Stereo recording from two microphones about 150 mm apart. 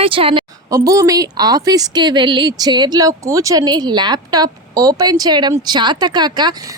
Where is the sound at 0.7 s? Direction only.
20° right (ahead or behind).